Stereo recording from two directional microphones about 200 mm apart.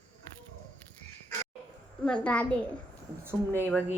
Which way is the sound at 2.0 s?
5° left (ahead or behind).